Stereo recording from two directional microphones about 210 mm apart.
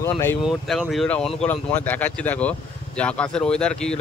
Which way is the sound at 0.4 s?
Centre (ahead or behind).